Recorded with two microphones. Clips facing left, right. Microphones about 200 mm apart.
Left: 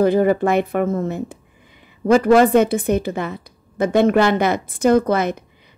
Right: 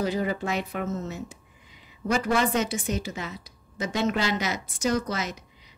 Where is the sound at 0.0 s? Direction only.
55° left (ahead or behind).